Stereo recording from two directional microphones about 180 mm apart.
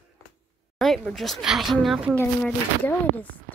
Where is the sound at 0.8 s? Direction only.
Centre (ahead or behind).